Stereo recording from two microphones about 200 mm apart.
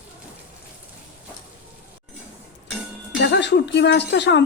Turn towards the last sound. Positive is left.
turn(degrees=60)  # may be behind; listen again after turning